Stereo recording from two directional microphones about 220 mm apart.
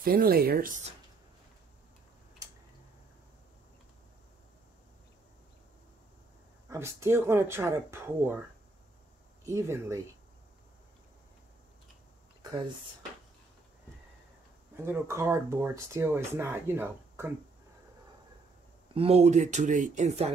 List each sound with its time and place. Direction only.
0.0 s speech: 40° right (ahead or behind)
6.7 s speech: 10° right (ahead or behind)
9.4 s speech: 15° right (ahead or behind)
14.9 s speech: 10° right (ahead or behind)
18.9 s speech: 30° right (ahead or behind)